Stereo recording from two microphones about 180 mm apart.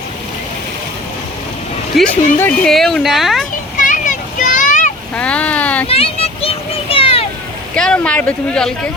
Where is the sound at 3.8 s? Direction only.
45° left (ahead or behind).